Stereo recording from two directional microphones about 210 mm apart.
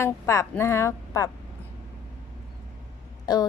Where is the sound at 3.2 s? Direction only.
20° left (ahead or behind).